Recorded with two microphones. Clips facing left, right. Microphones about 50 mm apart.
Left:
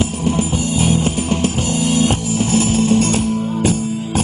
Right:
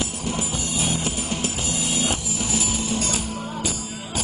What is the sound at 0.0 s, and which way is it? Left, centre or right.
Music, left.